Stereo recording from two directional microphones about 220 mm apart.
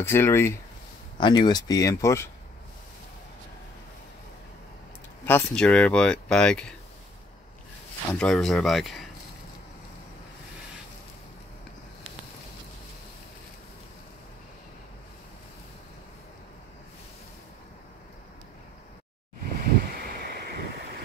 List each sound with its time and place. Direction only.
0.0 s speech: 10° left (ahead or behind)
5.2 s speech: 10° left (ahead or behind)
8.1 s speech: 5° left (ahead or behind)
20.0 s a sound: 45° right (ahead or behind)